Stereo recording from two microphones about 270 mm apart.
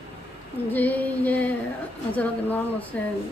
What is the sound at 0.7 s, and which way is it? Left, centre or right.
Speech, centre.